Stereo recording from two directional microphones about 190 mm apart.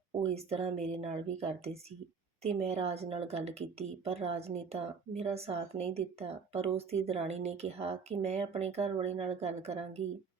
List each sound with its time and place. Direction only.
0.3 s speech: 35° right (ahead or behind)